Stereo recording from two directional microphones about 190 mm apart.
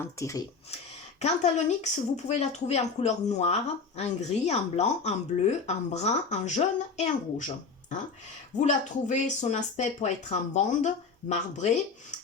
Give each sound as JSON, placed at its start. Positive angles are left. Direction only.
{"t": 0.0, "sound": "speech", "side_deg": 15}
{"t": 1.2, "sound": "speech", "side_deg": 40}